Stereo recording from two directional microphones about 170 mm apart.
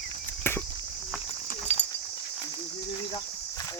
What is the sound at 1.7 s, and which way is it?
Horse, 40° left (ahead or behind).